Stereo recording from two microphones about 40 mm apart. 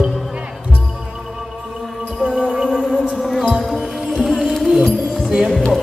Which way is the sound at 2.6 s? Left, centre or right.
Centre.